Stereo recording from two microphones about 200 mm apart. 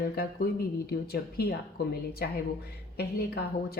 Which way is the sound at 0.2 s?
50° left (ahead or behind).